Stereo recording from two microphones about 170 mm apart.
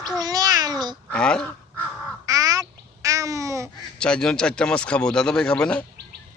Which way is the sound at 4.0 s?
5° left (ahead or behind).